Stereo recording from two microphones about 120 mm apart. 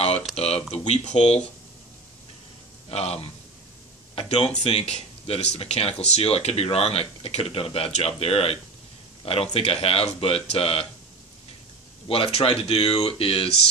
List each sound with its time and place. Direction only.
0.0 s a sound: 55° left (ahead or behind)
0.4 s speech: 60° left (ahead or behind)
2.9 s speech: 60° left (ahead or behind)
12.1 s speech: 55° left (ahead or behind)